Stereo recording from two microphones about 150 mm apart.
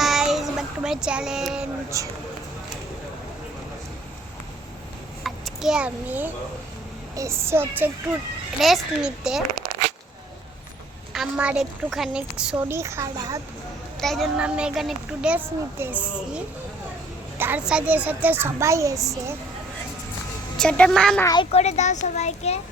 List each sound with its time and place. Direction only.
0.0 s child singing: centre (ahead or behind)
1.9 s speech: 20° right (ahead or behind)
5.2 s a child's voice: centre (ahead or behind)
8.5 s speech: centre (ahead or behind)
11.1 s a woman's voice: 5° right (ahead or behind); by 13.4 s 20° right (ahead or behind)
14.0 s a woman's voice: centre (ahead or behind)
17.3 s a woman's voice: 15° right (ahead or behind)
20.6 s speech: 5° left (ahead or behind)
21.5 s a child's voice: 45° left (ahead or behind)